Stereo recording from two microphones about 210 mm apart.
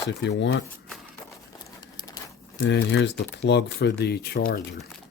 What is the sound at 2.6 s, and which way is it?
Speech, 55° left (ahead or behind).